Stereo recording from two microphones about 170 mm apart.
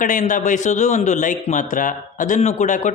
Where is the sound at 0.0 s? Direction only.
50° left (ahead or behind).